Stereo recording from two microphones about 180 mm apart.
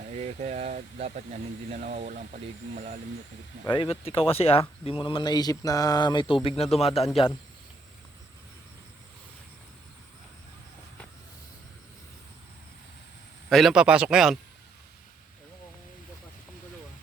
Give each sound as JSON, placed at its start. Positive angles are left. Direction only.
{"t": 0.2, "sound": "speech", "side_deg": -35}
{"t": 3.7, "sound": "speech", "side_deg": 30}
{"t": 13.5, "sound": "speech", "side_deg": 0}